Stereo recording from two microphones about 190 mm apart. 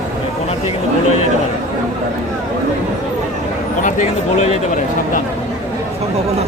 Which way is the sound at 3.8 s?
40° left (ahead or behind).